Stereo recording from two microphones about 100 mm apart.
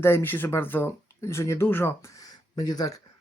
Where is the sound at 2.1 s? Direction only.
40° left (ahead or behind).